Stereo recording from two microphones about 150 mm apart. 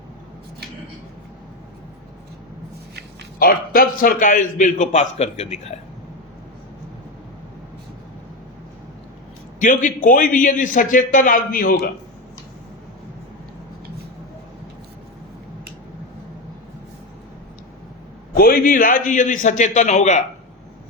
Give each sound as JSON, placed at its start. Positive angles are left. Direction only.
{"t": 3.3, "sound": "a man's voice", "side_deg": 75}
{"t": 9.6, "sound": "a man's voice", "side_deg": 60}
{"t": 18.3, "sound": "a man's voice", "side_deg": 75}